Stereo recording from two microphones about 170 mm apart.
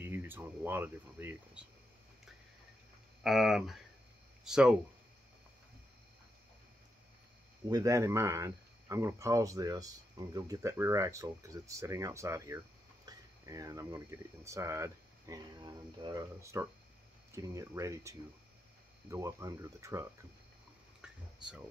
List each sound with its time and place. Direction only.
0.0 s speech: 15° right (ahead or behind)
3.3 s speech: centre (ahead or behind)
7.6 s speech: 20° right (ahead or behind)
21.0 s a sound: 5° right (ahead or behind)